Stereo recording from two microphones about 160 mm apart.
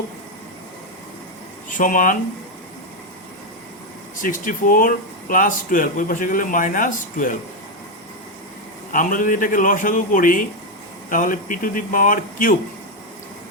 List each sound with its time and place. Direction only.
1.7 s speech: 55° left (ahead or behind)
4.2 s speech: 55° left (ahead or behind)
8.9 s speech: 55° left (ahead or behind)